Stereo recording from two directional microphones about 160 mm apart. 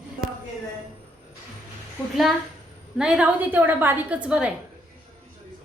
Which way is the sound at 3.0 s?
5° right (ahead or behind).